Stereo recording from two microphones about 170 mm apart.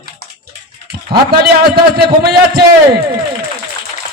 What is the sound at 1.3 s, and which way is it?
A man's voice, 65° right (ahead or behind).